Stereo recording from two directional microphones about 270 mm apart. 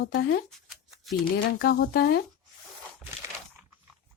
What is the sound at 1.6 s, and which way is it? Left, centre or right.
Speech, left.